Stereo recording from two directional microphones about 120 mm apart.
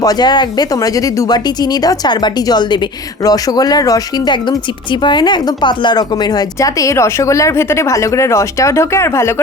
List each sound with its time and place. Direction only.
0.0 s a woman's voice: 35° left (ahead or behind)